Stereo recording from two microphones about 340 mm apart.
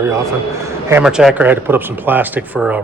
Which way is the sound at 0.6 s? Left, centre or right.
Centre.